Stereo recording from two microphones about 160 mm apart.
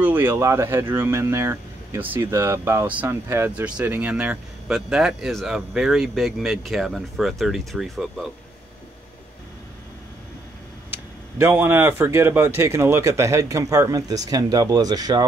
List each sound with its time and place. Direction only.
0.0 s speech: 10° right (ahead or behind)
10.9 s speech: 15° right (ahead or behind)